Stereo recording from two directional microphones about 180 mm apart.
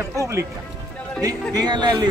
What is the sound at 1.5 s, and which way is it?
Speech, 25° right (ahead or behind).